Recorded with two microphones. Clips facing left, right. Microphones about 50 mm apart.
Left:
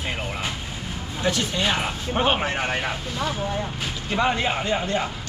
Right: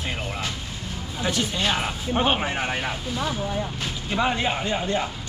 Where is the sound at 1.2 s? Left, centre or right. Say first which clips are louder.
Left 1 dB; centre.